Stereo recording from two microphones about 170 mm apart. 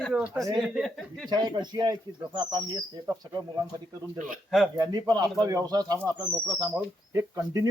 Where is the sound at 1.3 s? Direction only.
25° right (ahead or behind).